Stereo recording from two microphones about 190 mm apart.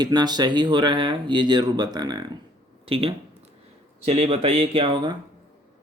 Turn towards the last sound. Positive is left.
turn(degrees=-25)  # may be behind; listen again after turning